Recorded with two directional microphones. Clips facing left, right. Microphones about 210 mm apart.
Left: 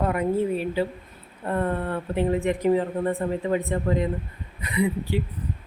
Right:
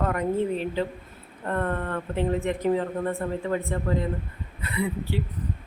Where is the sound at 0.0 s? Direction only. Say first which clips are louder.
Left 2 dB; 10° left (ahead or behind).